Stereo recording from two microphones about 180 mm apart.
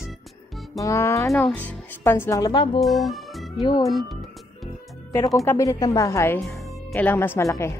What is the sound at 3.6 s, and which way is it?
Speech, 20° left (ahead or behind).